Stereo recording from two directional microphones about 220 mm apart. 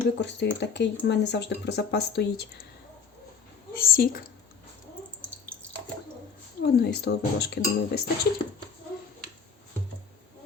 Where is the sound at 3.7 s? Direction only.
40° left (ahead or behind).